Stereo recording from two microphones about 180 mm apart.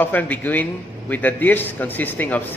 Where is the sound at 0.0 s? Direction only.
10° left (ahead or behind).